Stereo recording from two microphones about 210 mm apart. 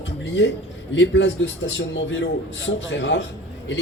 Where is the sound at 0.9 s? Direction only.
55° left (ahead or behind).